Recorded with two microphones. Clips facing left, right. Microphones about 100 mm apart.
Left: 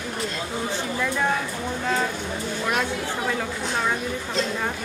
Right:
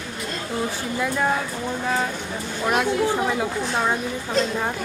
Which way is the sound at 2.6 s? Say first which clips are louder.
Right 7 dB; 15° right (ahead or behind).